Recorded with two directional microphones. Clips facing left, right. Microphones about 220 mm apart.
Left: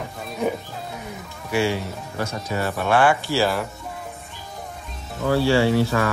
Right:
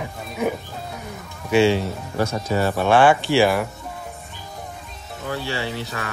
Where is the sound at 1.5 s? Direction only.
25° right (ahead or behind).